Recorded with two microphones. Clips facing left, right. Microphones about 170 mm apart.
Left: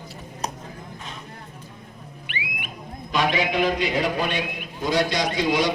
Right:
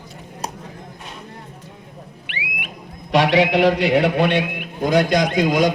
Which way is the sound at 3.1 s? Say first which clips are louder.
Right 7 dB; 75° right (ahead or behind).